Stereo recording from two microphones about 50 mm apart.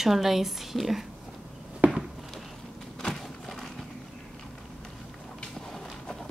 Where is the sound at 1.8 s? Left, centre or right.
Right.